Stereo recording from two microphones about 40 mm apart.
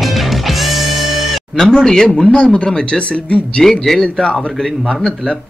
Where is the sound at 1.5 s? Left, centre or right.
Centre.